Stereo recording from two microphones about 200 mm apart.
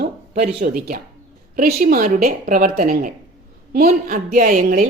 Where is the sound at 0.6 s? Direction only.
50° right (ahead or behind).